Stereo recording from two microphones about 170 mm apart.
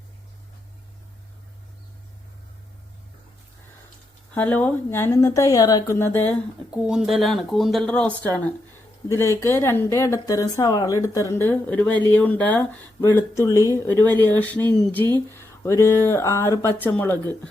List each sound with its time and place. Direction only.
4.4 s speech: 10° left (ahead or behind)
6.7 s speech: 5° right (ahead or behind); by 17.2 s 10° left (ahead or behind)